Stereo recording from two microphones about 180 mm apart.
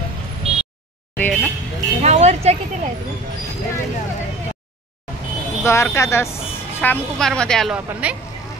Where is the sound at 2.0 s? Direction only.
40° right (ahead or behind).